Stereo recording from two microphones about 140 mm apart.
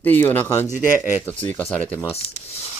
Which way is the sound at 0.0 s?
15° left (ahead or behind).